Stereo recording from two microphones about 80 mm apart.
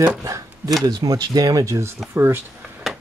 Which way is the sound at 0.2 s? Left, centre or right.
Right.